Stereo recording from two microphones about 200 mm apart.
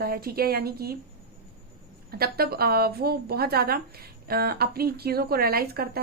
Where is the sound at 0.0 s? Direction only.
50° right (ahead or behind).